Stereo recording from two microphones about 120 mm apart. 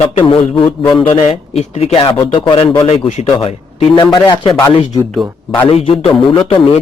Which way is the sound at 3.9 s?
40° left (ahead or behind).